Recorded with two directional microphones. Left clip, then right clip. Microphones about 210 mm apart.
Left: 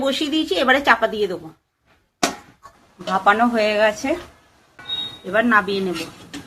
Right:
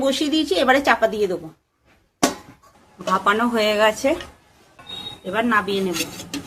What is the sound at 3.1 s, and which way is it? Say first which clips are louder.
Speech: left 2 dB; 5° right (ahead or behind).